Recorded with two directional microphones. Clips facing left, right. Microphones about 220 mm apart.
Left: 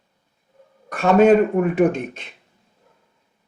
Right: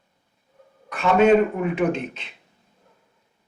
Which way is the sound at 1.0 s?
40° left (ahead or behind).